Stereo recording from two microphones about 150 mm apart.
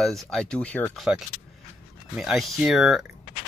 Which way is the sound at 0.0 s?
5° left (ahead or behind).